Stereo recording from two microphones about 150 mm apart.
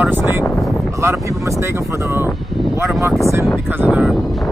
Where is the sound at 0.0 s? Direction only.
15° right (ahead or behind).